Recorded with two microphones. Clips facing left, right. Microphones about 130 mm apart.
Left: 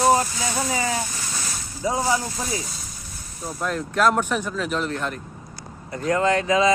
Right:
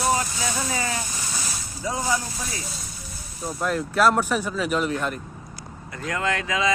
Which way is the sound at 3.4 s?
Centre (ahead or behind).